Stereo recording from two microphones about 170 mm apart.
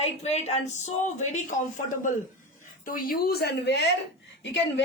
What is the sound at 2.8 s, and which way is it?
A woman's voice, 55° left (ahead or behind).